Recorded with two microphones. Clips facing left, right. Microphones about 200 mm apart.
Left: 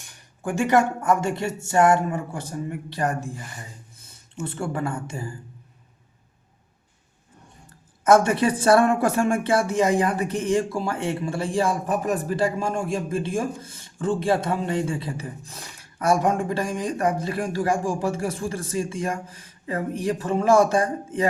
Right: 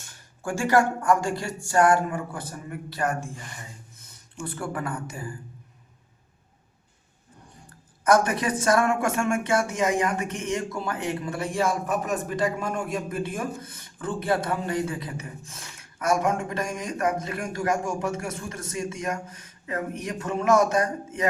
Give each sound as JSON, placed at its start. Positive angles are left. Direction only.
{"t": 0.0, "sound": "speech", "side_deg": 15}
{"t": 3.9, "sound": "a sound", "side_deg": 30}
{"t": 4.4, "sound": "speech", "side_deg": 25}
{"t": 7.7, "sound": "speech", "side_deg": 25}